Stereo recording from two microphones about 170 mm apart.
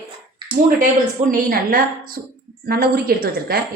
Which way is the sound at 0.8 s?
55° right (ahead or behind).